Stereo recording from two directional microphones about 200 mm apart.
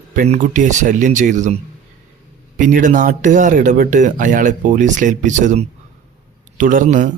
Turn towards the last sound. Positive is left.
turn(degrees=-40)  # may be behind; listen again after turning